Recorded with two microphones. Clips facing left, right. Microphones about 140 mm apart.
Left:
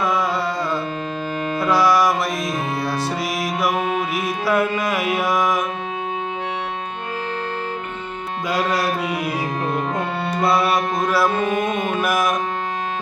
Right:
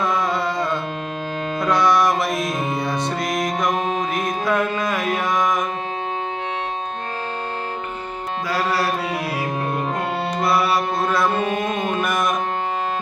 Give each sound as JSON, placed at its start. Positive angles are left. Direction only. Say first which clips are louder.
{"t": 1.5, "sound": "music", "louder": "left 1 dB", "side_deg": 5}
{"t": 8.4, "sound": "music", "louder": "left 1 dB", "side_deg": 20}
{"t": 10.7, "sound": "music", "louder": "left 1 dB", "side_deg": 10}
{"t": 11.5, "sound": "music", "louder": "left 2 dB", "side_deg": 50}
{"t": 11.9, "sound": "music", "louder": "left 1 dB", "side_deg": 5}